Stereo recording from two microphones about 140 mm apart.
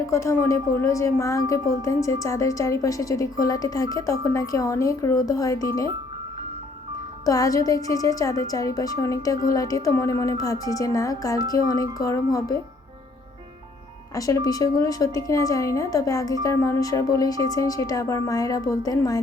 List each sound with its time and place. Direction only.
0.1 s a woman's voice: 20° left (ahead or behind)
7.3 s a woman's voice: 25° left (ahead or behind)
14.2 s a woman's voice: 25° left (ahead or behind)